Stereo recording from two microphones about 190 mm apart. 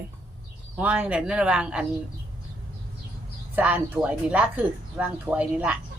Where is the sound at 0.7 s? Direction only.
10° right (ahead or behind).